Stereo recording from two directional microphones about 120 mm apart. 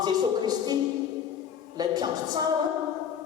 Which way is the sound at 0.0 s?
35° right (ahead or behind).